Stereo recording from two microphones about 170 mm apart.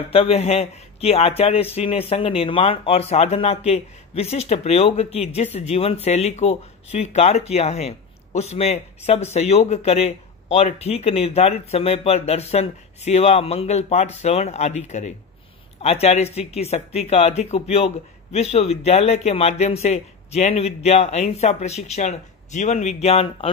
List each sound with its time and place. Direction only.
0.1 s speech: 35° left (ahead or behind)